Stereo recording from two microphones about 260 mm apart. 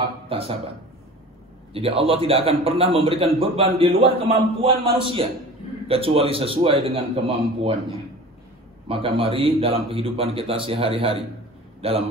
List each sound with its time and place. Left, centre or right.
0.3 s a man's voice: right
1.7 s a man's voice: right
8.8 s a man's voice: right